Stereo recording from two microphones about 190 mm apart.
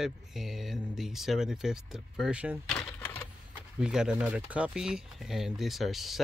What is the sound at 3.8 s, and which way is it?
Speech, 5° right (ahead or behind).